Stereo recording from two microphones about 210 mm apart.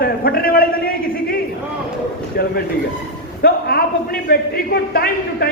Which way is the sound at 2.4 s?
45° left (ahead or behind).